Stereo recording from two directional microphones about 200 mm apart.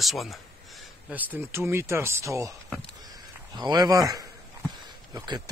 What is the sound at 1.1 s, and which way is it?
Speech, 10° right (ahead or behind).